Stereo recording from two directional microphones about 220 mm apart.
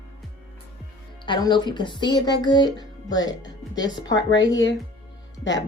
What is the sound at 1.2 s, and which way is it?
Speech, 20° left (ahead or behind).